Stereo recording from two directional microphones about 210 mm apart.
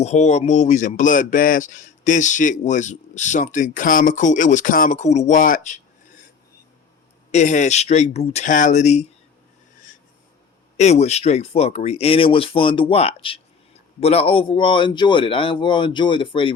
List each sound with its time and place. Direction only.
0.0 s speech: 30° left (ahead or behind)
7.3 s speech: 35° left (ahead or behind)
10.8 s speech: 30° left (ahead or behind)